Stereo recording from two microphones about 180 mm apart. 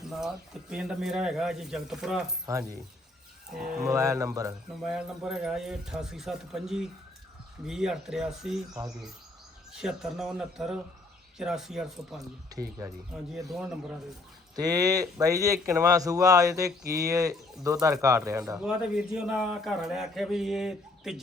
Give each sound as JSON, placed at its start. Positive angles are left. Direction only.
{"t": 0.0, "sound": "a man's voice", "side_deg": 0}
{"t": 3.5, "sound": "a man's voice", "side_deg": -5}
{"t": 3.8, "sound": "speech", "side_deg": -20}
{"t": 4.8, "sound": "a man's voice", "side_deg": -5}
{"t": 13.3, "sound": "a man's voice", "side_deg": 0}
{"t": 14.5, "sound": "speech", "side_deg": -20}
{"t": 18.6, "sound": "a man's voice", "side_deg": -5}